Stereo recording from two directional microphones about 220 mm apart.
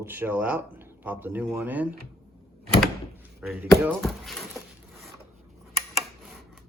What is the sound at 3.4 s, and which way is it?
Speech, 10° right (ahead or behind).